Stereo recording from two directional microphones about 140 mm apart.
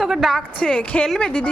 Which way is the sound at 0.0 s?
Centre (ahead or behind).